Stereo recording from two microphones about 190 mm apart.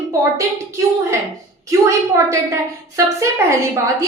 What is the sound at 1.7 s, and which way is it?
A woman's voice, 15° right (ahead or behind).